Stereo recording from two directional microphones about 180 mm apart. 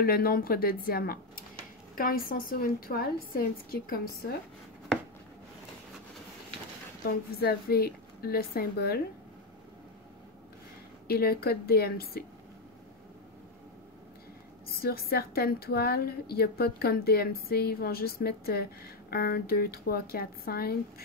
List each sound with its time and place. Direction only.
0.0 s a woman's voice: 55° left (ahead or behind)
7.1 s a woman's voice: 60° left (ahead or behind)
11.1 s a woman's voice: 60° left (ahead or behind)
14.7 s a woman's voice: 55° left (ahead or behind)